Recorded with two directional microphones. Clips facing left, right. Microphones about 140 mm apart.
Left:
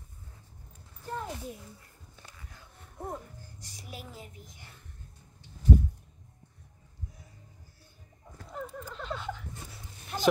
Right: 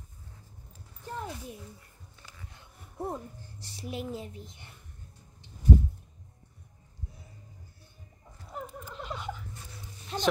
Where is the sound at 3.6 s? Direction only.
30° right (ahead or behind).